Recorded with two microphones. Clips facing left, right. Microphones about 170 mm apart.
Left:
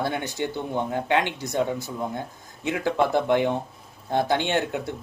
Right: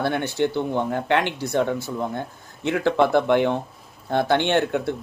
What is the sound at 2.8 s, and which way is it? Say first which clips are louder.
Speech: right 4 dB; 65° right (ahead or behind).